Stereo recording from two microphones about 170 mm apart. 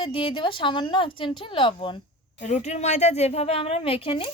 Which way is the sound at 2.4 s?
40° left (ahead or behind).